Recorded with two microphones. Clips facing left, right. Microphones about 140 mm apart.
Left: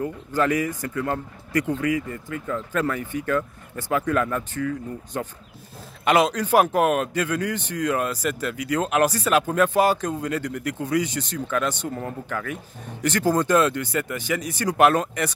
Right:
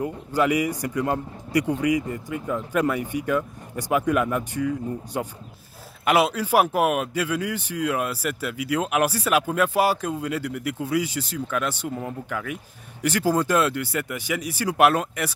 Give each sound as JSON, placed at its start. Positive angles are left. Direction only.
{"t": 0.0, "sound": "a man's voice", "side_deg": -10}